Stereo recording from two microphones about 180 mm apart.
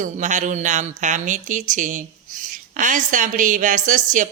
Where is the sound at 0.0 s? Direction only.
45° right (ahead or behind).